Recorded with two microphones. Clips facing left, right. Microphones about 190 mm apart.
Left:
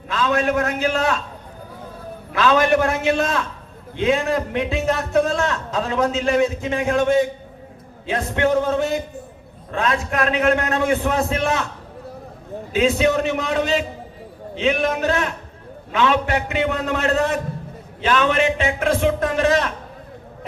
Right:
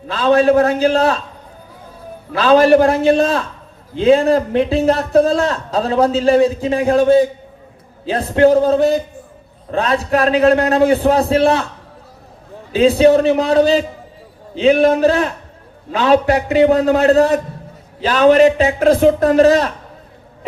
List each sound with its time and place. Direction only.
0.1 s a man's voice: 35° right (ahead or behind)
2.3 s a man's voice: 35° right (ahead or behind)
12.7 s a man's voice: 35° right (ahead or behind)